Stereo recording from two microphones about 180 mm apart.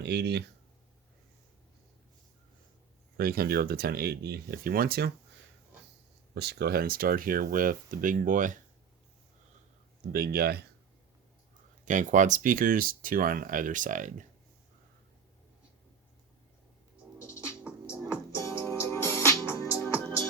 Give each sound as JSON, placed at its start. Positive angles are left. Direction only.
{"t": 0.0, "sound": "speech", "side_deg": -65}
{"t": 3.2, "sound": "speech", "side_deg": -55}
{"t": 6.3, "sound": "speech", "side_deg": -65}
{"t": 10.1, "sound": "speech", "side_deg": -55}
{"t": 11.9, "sound": "speech", "side_deg": -45}
{"t": 17.2, "sound": "music", "side_deg": 15}